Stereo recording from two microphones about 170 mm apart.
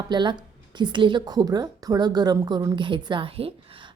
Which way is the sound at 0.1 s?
25° right (ahead or behind).